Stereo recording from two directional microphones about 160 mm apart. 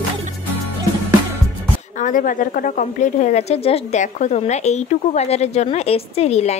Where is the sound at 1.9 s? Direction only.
55° left (ahead or behind).